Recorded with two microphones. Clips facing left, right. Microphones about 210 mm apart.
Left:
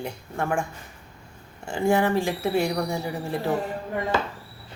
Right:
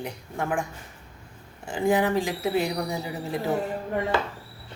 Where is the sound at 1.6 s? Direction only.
15° right (ahead or behind).